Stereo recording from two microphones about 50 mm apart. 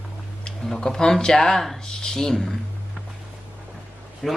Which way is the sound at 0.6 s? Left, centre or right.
Centre.